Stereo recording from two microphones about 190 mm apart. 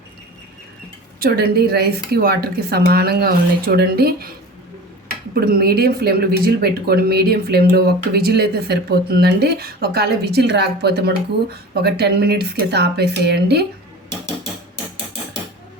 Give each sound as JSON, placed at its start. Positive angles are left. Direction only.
{"t": 1.2, "sound": "speech", "side_deg": -55}
{"t": 5.3, "sound": "speech", "side_deg": -55}